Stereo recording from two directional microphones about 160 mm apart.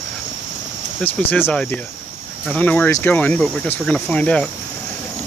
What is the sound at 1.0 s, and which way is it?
Speech, 10° left (ahead or behind).